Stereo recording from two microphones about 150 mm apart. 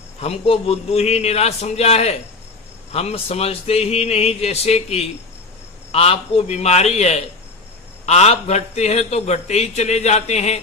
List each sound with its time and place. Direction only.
0.2 s a man's voice: 40° left (ahead or behind)